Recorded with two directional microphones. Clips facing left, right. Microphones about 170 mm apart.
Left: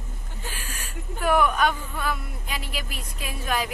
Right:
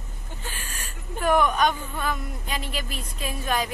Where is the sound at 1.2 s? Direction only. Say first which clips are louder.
Right 1 dB; 10° left (ahead or behind).